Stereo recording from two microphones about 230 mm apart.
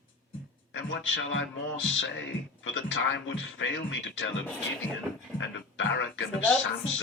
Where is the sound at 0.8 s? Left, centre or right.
Left.